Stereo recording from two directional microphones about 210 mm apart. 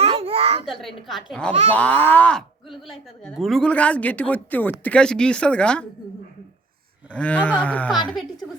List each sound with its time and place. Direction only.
0.0 s a sound: 30° right (ahead or behind)
0.6 s speech: centre (ahead or behind)
7.1 s speech: 5° left (ahead or behind)